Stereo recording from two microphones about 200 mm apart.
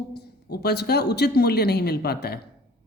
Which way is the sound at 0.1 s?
55° left (ahead or behind).